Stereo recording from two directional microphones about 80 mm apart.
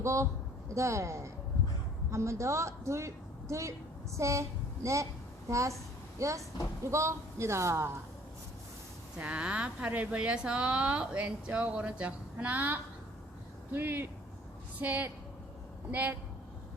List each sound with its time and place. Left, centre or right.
0.0 s a woman's voice: right
9.1 s a woman's voice: centre